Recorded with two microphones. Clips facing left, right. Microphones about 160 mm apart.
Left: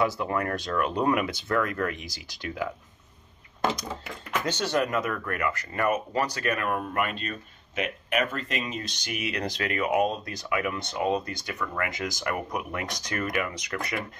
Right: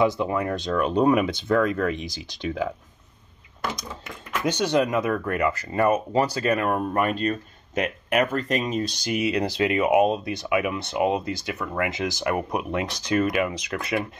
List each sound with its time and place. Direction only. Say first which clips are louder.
0.0 s speech: right 4 dB; 20° right (ahead or behind)
4.5 s speech: right 5 dB; 15° right (ahead or behind)